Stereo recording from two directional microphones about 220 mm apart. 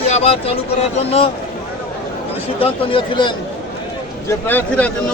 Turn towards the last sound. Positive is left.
turn(degrees=10)  # may be behind; listen again after turning